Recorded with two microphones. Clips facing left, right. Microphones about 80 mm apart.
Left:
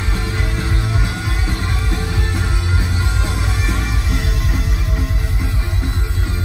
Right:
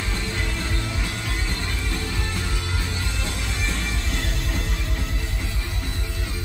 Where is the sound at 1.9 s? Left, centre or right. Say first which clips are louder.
Left 5 dB; left.